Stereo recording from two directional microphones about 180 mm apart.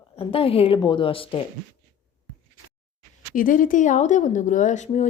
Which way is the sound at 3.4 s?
50° left (ahead or behind).